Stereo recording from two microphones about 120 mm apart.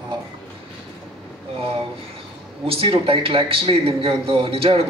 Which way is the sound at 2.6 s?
50° right (ahead or behind).